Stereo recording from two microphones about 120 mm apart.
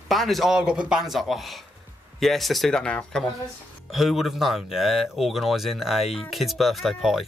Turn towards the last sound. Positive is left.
turn(degrees=0)  # may be behind; listen again after turning